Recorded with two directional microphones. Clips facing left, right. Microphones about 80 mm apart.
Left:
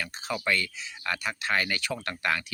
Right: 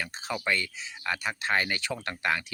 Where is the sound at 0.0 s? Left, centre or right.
Right.